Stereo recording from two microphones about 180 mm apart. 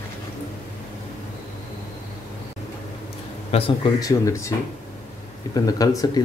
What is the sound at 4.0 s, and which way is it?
Speech, 15° left (ahead or behind).